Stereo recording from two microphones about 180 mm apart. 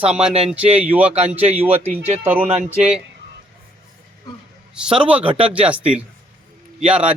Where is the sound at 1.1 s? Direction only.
35° right (ahead or behind).